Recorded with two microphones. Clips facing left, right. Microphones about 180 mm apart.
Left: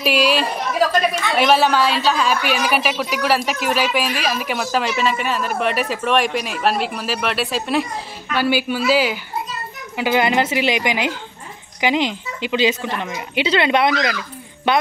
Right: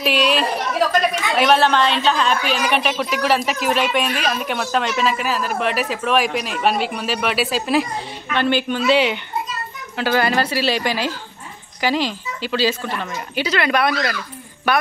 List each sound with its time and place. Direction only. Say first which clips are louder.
0.0 s a woman's voice: left 1 dB; centre (ahead or behind)
9.9 s a woman's voice: left 1 dB; 15° left (ahead or behind)